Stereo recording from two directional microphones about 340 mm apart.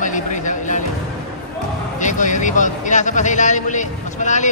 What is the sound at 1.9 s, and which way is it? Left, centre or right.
A man's voice, left.